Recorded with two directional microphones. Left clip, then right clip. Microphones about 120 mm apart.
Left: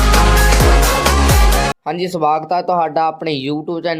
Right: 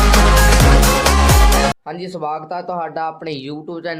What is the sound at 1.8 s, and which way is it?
Speech, 65° left (ahead or behind).